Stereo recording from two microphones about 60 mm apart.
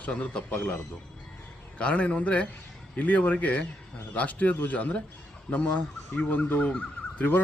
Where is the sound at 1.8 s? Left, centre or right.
Centre.